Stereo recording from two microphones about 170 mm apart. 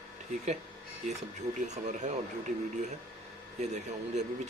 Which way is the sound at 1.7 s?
45° right (ahead or behind).